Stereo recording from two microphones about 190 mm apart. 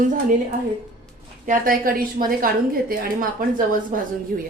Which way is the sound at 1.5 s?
45° right (ahead or behind).